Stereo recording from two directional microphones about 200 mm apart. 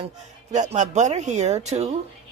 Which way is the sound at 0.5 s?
35° right (ahead or behind).